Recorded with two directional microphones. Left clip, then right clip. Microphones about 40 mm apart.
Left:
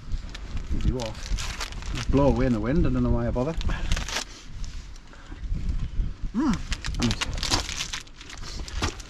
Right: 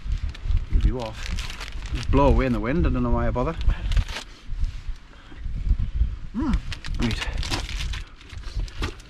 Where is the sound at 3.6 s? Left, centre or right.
Left.